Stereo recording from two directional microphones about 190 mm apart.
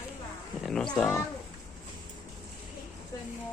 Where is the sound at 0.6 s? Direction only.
Centre (ahead or behind).